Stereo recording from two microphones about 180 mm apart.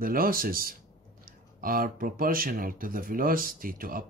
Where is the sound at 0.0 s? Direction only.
55° right (ahead or behind).